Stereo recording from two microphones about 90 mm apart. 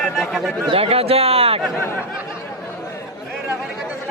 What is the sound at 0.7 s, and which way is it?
Speech, 90° right.